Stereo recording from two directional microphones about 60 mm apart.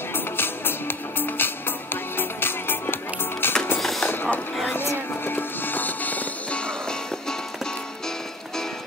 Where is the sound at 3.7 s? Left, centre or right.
Centre.